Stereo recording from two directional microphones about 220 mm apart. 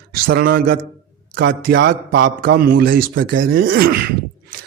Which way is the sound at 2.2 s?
40° right (ahead or behind).